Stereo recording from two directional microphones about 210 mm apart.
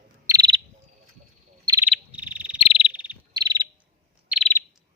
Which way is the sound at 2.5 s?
25° left (ahead or behind).